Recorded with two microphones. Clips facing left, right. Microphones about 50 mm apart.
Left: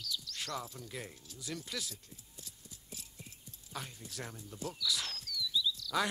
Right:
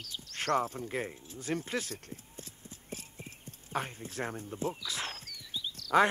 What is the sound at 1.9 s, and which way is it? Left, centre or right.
Clip-clop, right.